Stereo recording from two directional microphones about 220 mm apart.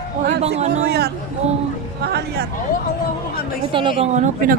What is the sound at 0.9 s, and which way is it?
A man's voice, 45° right (ahead or behind).